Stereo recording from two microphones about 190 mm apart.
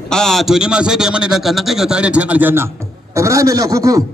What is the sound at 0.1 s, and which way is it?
A man's voice, centre (ahead or behind).